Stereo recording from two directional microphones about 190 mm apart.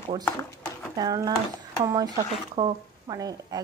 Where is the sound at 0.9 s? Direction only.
20° right (ahead or behind).